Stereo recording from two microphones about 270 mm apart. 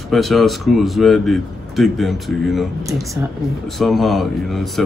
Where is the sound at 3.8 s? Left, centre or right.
Centre.